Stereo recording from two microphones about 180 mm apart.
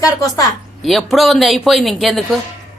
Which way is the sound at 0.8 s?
Centre (ahead or behind).